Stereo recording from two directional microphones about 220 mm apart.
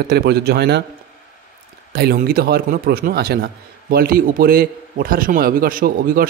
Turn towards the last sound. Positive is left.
turn(degrees=-40)  # may be behind; listen again after turning